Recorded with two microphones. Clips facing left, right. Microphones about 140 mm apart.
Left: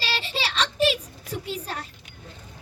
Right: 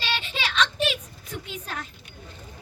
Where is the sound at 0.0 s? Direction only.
35° left (ahead or behind).